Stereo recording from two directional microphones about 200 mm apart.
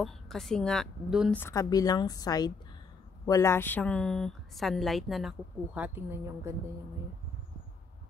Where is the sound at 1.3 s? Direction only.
15° left (ahead or behind); by 6.5 s 10° right (ahead or behind).